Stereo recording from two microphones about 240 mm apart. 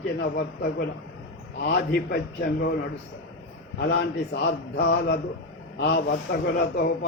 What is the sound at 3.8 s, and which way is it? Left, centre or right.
A man's voice, left.